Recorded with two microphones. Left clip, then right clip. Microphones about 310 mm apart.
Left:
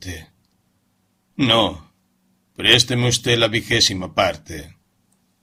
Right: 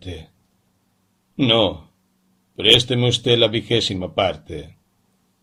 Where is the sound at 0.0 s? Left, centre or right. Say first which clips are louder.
Left 1 dB; left.